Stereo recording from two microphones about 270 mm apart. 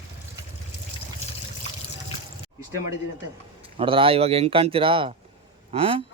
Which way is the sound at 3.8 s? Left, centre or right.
Centre.